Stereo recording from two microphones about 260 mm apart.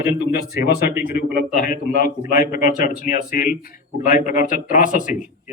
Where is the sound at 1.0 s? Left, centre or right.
Left.